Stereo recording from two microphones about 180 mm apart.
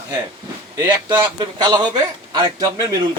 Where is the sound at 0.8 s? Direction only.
20° right (ahead or behind).